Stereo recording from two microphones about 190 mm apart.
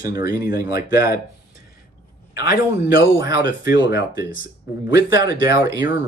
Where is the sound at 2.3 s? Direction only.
50° left (ahead or behind).